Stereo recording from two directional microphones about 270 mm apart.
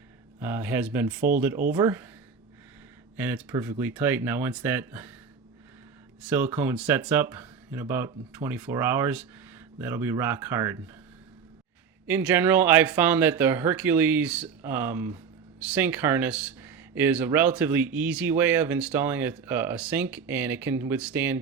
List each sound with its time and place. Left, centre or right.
0.3 s speech: centre
3.2 s speech: centre
6.2 s speech: centre
12.0 s speech: centre